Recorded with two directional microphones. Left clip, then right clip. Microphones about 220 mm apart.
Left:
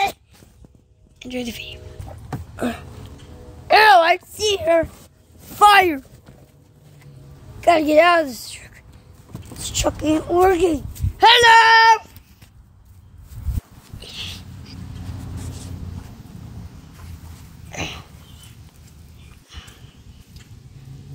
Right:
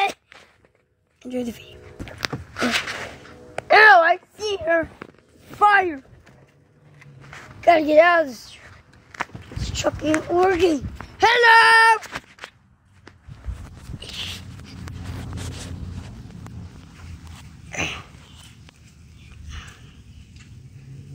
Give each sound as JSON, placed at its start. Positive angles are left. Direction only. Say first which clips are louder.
{"t": 1.2, "sound": "a woman's voice", "louder": "left 1 dB", "side_deg": -10}
{"t": 3.6, "sound": "a sound", "louder": "even", "side_deg": 0}
{"t": 4.0, "sound": "a sound", "louder": "left 2 dB", "side_deg": 20}
{"t": 5.6, "sound": "speech", "louder": "left 4 dB", "side_deg": 55}
{"t": 7.6, "sound": "a woman's voice", "louder": "left 1 dB", "side_deg": 20}
{"t": 9.7, "sound": "a child's voice", "louder": "left 2 dB", "side_deg": 25}
{"t": 10.6, "sound": "speech", "louder": "even", "side_deg": 5}
{"t": 17.6, "sound": "a sound", "louder": "right 3 dB", "side_deg": 5}
{"t": 19.5, "sound": "horse", "louder": "right 1 dB", "side_deg": 5}